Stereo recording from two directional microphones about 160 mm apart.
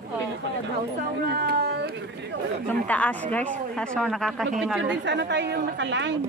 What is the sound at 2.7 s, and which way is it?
Speech, 10° left (ahead or behind).